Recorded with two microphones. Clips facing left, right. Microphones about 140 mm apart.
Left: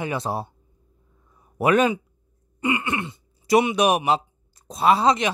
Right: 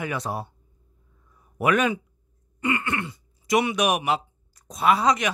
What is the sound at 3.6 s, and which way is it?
Speech, 30° left (ahead or behind).